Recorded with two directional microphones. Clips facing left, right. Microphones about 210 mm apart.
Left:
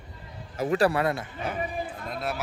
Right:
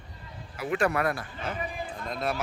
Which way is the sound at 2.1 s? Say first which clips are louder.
Right 3 dB; 5° left (ahead or behind).